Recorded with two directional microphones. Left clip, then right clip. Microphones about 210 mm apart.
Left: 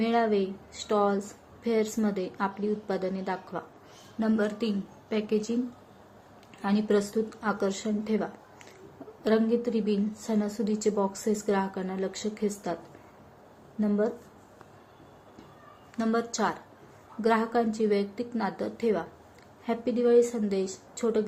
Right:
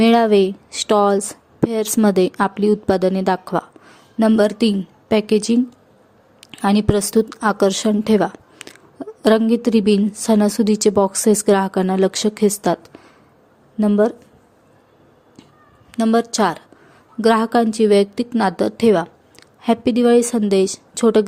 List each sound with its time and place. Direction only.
0.0 s a woman's voice: 55° right (ahead or behind)
16.0 s a woman's voice: 45° right (ahead or behind)